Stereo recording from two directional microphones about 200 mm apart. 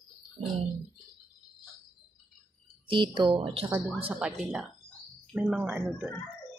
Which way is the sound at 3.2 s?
25° right (ahead or behind).